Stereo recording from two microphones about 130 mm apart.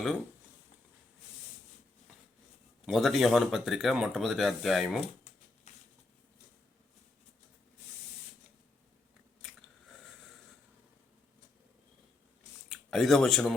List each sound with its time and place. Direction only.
2.8 s speech: centre (ahead or behind)
5.7 s a sound: 60° left (ahead or behind)
9.4 s biting: centre (ahead or behind)
12.6 s speech: centre (ahead or behind)